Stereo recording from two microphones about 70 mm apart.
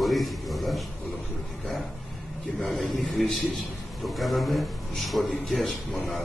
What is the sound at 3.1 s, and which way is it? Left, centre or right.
A man's voice, centre.